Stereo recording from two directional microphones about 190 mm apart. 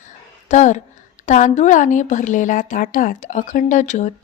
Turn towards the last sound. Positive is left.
turn(degrees=40)  # may be behind; listen again after turning